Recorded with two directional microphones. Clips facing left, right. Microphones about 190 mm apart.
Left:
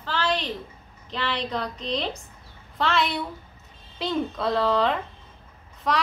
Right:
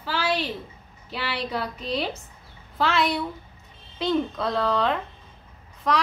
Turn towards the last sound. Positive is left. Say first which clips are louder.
# right 1 dB
turn(degrees=0)  # may be behind; listen again after turning